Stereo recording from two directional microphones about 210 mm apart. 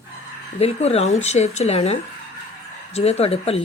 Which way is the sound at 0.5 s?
30° left (ahead or behind).